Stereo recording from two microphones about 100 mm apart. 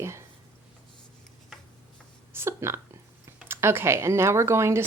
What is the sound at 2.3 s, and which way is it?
Speech, 25° right (ahead or behind).